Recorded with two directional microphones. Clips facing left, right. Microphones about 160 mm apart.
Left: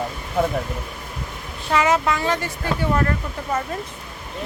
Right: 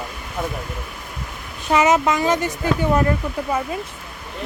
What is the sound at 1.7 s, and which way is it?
A woman's voice, 20° right (ahead or behind).